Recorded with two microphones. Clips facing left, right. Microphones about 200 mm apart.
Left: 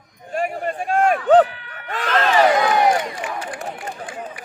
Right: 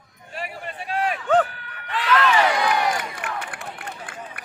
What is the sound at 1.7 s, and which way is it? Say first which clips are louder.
Crowd: even; 45° left (ahead or behind).